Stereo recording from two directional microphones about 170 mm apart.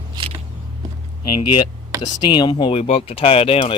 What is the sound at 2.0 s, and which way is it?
Speech, 25° left (ahead or behind).